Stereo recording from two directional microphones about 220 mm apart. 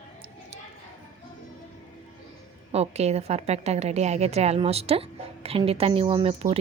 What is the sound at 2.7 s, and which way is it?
A woman's voice, 30° right (ahead or behind).